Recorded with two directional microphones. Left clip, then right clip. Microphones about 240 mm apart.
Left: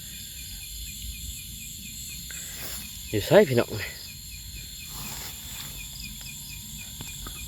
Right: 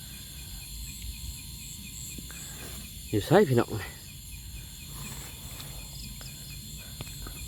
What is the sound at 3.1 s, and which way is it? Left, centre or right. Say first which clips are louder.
Speech: left 4 dB; centre.